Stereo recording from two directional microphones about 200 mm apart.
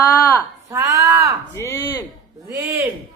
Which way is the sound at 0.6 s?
15° right (ahead or behind).